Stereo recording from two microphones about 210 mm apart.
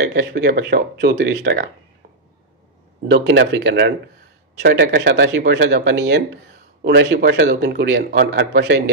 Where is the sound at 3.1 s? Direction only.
55° right (ahead or behind).